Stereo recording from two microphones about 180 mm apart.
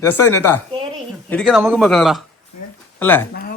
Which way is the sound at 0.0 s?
15° left (ahead or behind).